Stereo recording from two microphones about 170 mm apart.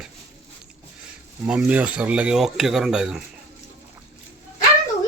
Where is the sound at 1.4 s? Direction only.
5° right (ahead or behind).